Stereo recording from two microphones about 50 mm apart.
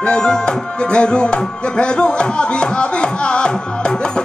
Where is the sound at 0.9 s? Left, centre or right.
Centre.